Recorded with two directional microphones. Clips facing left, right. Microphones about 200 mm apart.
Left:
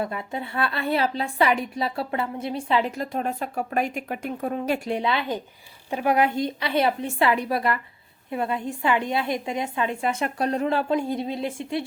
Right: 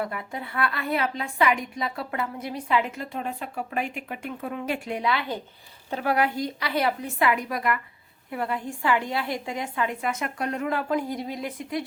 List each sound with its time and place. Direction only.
0.0 s a woman's voice: 25° left (ahead or behind)